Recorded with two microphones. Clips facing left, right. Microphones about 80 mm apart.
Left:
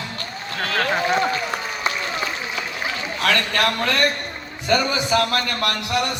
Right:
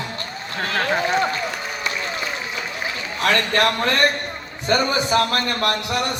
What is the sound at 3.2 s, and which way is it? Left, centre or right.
A man's voice, right.